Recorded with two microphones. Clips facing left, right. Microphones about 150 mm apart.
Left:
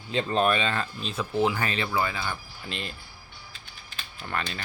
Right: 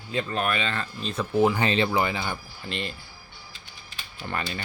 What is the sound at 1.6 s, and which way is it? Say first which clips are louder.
Speech: right 4 dB; 30° right (ahead or behind).